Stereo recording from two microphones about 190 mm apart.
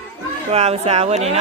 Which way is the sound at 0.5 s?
35° right (ahead or behind).